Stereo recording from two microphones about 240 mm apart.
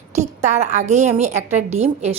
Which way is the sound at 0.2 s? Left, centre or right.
Right.